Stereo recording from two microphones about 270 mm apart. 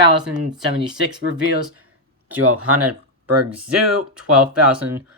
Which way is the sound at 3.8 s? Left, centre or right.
Right.